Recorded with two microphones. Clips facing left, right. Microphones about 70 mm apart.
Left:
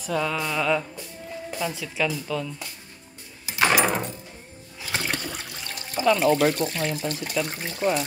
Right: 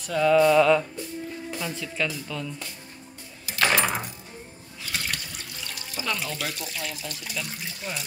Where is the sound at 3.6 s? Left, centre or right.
Centre.